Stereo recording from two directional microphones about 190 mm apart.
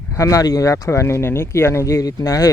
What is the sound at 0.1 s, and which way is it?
Speech, 15° left (ahead or behind).